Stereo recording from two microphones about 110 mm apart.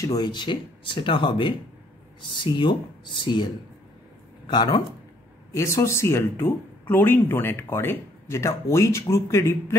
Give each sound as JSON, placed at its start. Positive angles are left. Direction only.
{"t": 0.0, "sound": "speech", "side_deg": 35}
{"t": 4.5, "sound": "speech", "side_deg": 40}
{"t": 5.5, "sound": "speech", "side_deg": 25}